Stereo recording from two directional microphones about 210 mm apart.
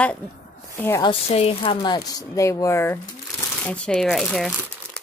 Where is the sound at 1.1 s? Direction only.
30° left (ahead or behind); by 5.0 s centre (ahead or behind).